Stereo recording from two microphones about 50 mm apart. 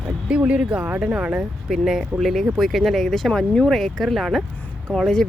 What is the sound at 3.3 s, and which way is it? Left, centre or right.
Speech, centre.